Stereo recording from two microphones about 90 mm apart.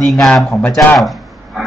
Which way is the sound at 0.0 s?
Centre (ahead or behind).